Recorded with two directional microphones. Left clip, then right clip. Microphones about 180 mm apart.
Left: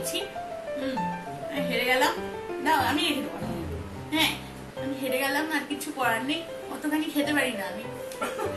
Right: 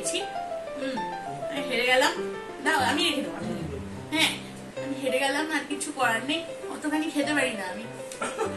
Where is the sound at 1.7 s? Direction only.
10° left (ahead or behind).